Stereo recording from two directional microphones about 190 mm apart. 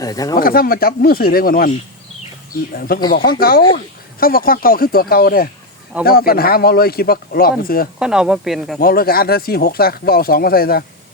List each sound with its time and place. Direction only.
0.0 s speech: 20° left (ahead or behind)
0.3 s speech: 50° left (ahead or behind)
2.7 s speech: 50° left (ahead or behind)
7.9 s speech: 5° right (ahead or behind)
8.8 s speech: 50° left (ahead or behind)